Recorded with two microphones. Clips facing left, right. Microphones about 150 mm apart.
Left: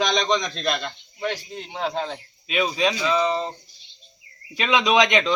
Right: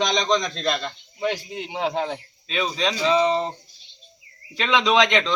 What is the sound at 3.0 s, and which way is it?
Speech, 25° right (ahead or behind).